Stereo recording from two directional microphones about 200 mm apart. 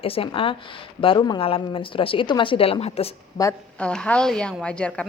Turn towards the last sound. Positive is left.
turn(degrees=5)  # may be behind; listen again after turning